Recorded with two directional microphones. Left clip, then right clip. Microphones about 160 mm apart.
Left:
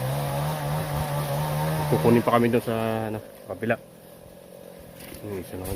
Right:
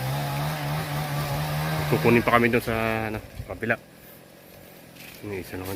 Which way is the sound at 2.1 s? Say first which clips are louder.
Right 1 dB; centre (ahead or behind).